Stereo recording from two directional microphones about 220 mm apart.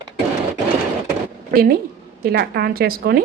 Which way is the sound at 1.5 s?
40° right (ahead or behind).